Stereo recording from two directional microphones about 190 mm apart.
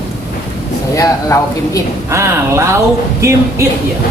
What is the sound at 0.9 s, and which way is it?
Speech, 15° left (ahead or behind).